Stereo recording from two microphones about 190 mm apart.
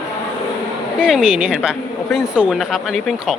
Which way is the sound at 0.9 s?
5° right (ahead or behind).